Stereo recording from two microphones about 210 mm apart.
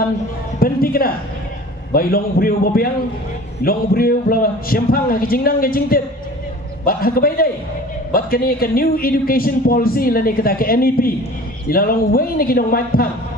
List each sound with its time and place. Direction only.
0.6 s speech: 45° left (ahead or behind)